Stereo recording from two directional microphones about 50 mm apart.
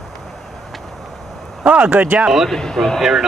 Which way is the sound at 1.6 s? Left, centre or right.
Right.